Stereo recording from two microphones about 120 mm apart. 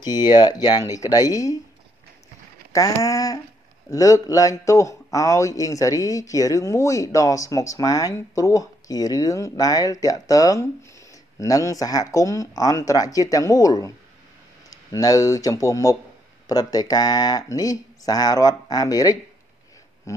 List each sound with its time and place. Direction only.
0.0 s speech: 35° left (ahead or behind)
2.7 s a man's voice: 30° left (ahead or behind)
20.1 s a sound: 25° left (ahead or behind)